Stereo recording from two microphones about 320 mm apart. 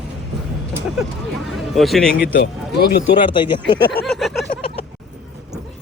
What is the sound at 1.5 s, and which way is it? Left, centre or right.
Speech, centre.